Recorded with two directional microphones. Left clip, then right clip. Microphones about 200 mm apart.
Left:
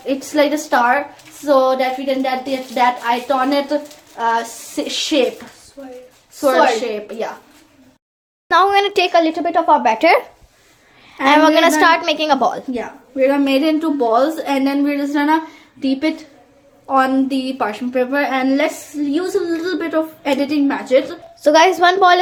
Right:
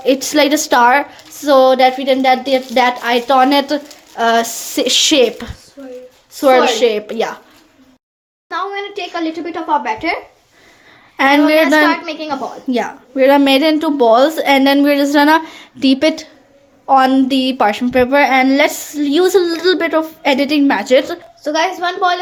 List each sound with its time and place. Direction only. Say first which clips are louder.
0.0 s speech: right 4 dB; 50° right (ahead or behind)
4.2 s a sound: right 5 dB; 55° right (ahead or behind)
6.7 s speech: right 5 dB; 45° right (ahead or behind)
8.4 s a woman's voice: left 9 dB; 45° left (ahead or behind)
9.4 s a woman's voice: left 4 dB; 40° left (ahead or behind)
11.2 s speech: right 3 dB; 45° right (ahead or behind)
11.8 s a woman's voice: left 1 dB; 40° left (ahead or behind)
12.7 s speech: right 6 dB; 50° right (ahead or behind)
21.4 s a woman's voice: left 5 dB; 35° left (ahead or behind)